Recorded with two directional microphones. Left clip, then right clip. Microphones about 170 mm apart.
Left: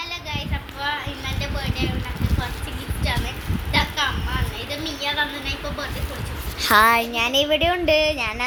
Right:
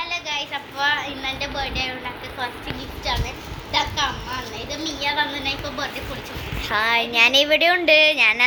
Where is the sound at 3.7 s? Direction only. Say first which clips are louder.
Even; 5° left (ahead or behind).